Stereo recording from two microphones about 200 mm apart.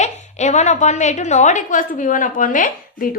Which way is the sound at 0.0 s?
35° left (ahead or behind).